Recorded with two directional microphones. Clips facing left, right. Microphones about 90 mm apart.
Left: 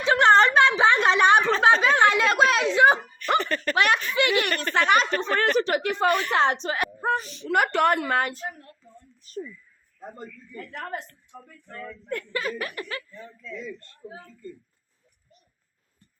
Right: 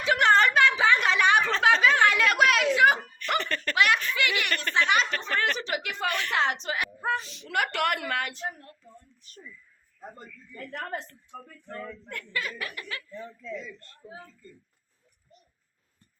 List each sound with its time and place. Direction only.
0.0 s a sound: 30° left (ahead or behind)
3.4 s laughter: 15° left (ahead or behind)
3.8 s a sound: 35° left (ahead or behind)
4.7 s a woman's voice: 50° left (ahead or behind)
7.2 s speech: centre (ahead or behind)
7.4 s speech: 40° left (ahead or behind)
12.0 s speech: 35° left (ahead or behind)